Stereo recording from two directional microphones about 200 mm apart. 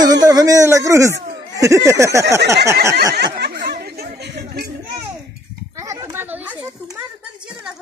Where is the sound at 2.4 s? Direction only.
60° right (ahead or behind).